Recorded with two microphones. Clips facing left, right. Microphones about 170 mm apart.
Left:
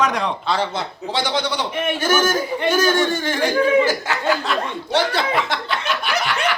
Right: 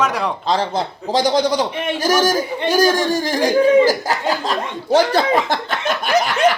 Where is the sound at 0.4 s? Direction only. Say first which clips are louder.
Right 3 dB; 40° right (ahead or behind).